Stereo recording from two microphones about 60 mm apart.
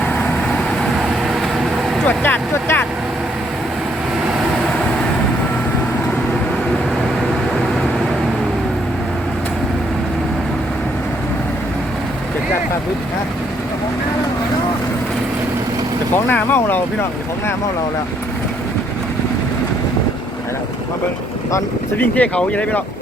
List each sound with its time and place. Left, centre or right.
0.8 s vehicle: centre
2.0 s speech: left
16.1 s vehicle: left
16.6 s speech: left
21.9 s speech: left